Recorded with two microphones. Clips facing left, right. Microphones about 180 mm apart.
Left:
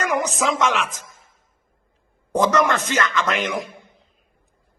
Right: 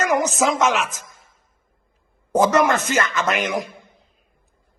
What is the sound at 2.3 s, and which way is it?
A man's voice, 5° right (ahead or behind).